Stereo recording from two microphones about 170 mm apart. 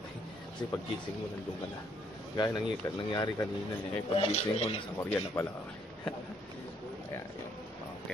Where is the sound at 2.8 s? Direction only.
20° left (ahead or behind).